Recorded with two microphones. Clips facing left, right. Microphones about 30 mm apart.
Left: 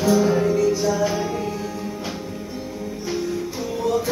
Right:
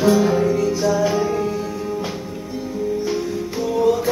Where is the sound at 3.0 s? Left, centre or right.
Centre.